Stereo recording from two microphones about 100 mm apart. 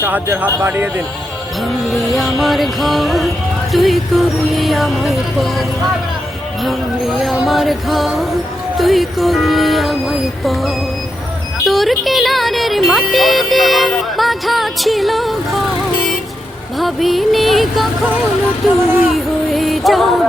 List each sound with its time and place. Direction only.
0.0 s speech: 20° right (ahead or behind)
1.6 s speech: centre (ahead or behind)
16.7 s speech: centre (ahead or behind)